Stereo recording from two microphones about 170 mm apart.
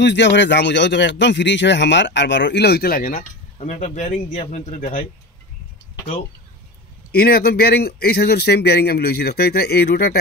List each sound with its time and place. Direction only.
0.0 s speech: 90° left; by 3.3 s 55° left (ahead or behind)
3.5 s speech: 45° left (ahead or behind)
7.1 s a man's voice: 65° left (ahead or behind)